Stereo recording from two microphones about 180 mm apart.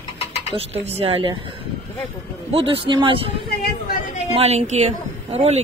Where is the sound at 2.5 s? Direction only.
30° right (ahead or behind).